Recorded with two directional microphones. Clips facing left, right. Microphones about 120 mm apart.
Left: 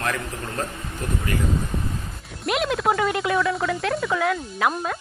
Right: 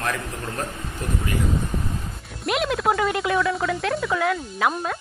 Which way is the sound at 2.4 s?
Centre (ahead or behind).